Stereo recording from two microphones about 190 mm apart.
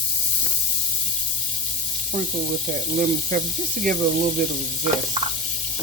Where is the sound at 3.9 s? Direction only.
45° right (ahead or behind).